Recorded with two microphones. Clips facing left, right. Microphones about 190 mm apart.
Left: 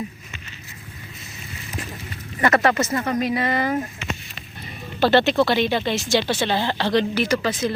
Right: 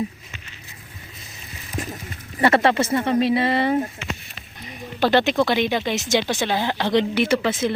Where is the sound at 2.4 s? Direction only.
30° right (ahead or behind).